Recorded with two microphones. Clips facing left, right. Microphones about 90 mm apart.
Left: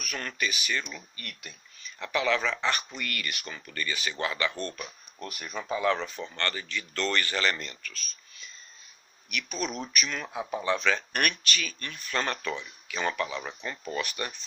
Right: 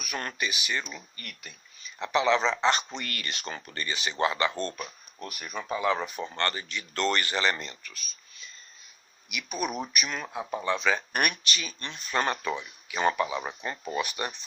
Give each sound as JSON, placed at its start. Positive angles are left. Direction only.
{"t": 0.2, "sound": "speech", "side_deg": -25}
{"t": 2.0, "sound": "speech", "side_deg": -20}
{"t": 4.8, "sound": "speech", "side_deg": -5}
{"t": 6.1, "sound": "speech", "side_deg": -15}
{"t": 9.3, "sound": "speech", "side_deg": -15}
{"t": 10.2, "sound": "speech", "side_deg": 0}
{"t": 10.8, "sound": "speech", "side_deg": -15}